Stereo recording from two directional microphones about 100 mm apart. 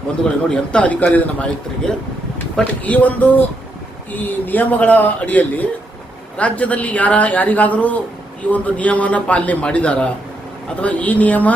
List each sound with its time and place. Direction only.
0.5 s speech: 10° left (ahead or behind)